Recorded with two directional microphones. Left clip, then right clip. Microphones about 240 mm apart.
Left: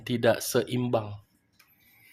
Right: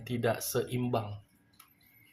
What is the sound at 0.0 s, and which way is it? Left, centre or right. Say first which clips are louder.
Speech: left 7 dB; left.